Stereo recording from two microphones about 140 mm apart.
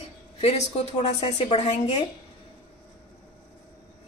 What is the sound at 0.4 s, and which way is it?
Speech, 50° left (ahead or behind).